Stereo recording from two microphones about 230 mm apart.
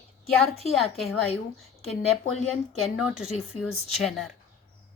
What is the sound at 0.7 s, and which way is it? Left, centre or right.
Speech, centre.